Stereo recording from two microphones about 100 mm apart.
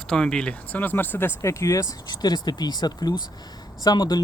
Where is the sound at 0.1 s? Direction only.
10° left (ahead or behind).